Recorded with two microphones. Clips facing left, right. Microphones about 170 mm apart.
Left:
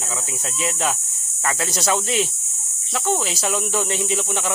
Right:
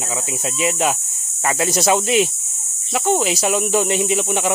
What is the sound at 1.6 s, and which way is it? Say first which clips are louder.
Speech: right 6 dB; 15° right (ahead or behind).